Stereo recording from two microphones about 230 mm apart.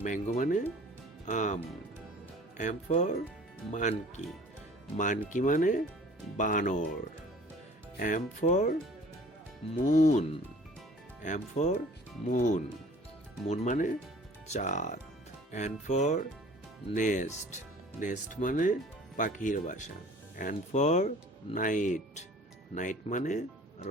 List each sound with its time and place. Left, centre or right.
0.0 s speech: left
2.6 s speech: left
7.9 s speech: left
9.7 s speech: left